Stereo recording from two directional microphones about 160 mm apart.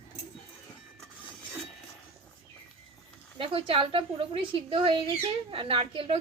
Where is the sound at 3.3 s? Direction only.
35° right (ahead or behind).